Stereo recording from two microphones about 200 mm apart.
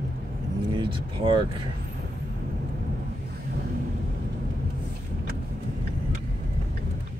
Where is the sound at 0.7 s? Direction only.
25° right (ahead or behind).